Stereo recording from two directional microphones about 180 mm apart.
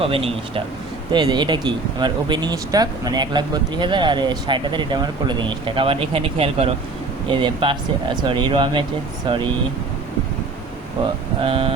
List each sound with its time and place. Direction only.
0.0 s speech: 30° right (ahead or behind)
11.4 s speech: 30° right (ahead or behind)